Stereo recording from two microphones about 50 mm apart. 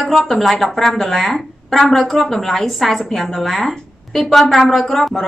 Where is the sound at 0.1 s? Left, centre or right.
Centre.